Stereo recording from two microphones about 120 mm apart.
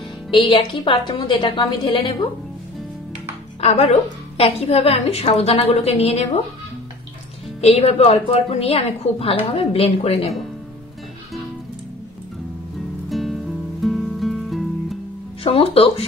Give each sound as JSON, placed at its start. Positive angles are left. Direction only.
{"t": 0.3, "sound": "a woman's voice", "side_deg": 45}
{"t": 3.6, "sound": "a woman's voice", "side_deg": 60}
{"t": 7.6, "sound": "a woman's voice", "side_deg": 60}
{"t": 13.1, "sound": "music", "side_deg": 0}
{"t": 15.4, "sound": "a woman's voice", "side_deg": 50}